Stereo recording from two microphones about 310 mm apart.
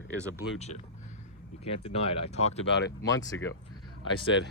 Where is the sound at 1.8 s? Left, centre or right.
Centre.